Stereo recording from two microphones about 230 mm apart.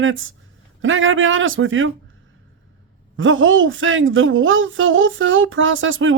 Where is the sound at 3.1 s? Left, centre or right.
Right.